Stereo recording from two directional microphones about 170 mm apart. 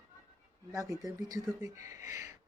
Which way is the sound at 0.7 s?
20° right (ahead or behind).